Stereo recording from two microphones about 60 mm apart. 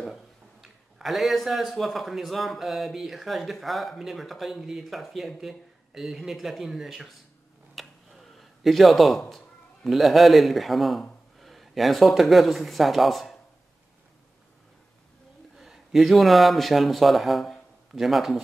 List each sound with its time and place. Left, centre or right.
0.0 s speech: centre
7.7 s a sound: centre
9.8 s a man's voice: centre
15.5 s speech: centre